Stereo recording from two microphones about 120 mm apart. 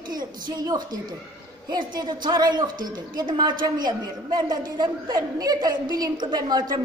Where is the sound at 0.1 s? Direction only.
35° right (ahead or behind).